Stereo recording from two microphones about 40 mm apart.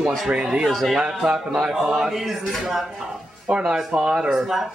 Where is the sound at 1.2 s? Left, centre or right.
Right.